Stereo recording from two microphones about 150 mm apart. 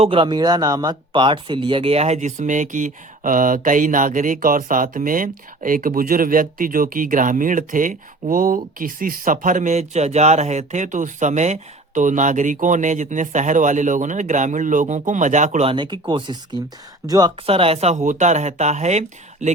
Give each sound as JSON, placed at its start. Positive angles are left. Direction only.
{"t": 0.0, "sound": "speech", "side_deg": -35}
{"t": 15.7, "sound": "speech", "side_deg": -30}
{"t": 17.4, "sound": "speech", "side_deg": -40}